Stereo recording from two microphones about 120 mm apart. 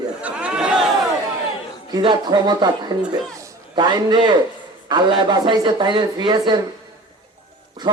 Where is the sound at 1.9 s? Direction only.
40° right (ahead or behind).